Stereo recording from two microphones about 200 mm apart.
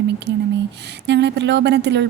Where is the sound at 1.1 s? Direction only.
60° right (ahead or behind).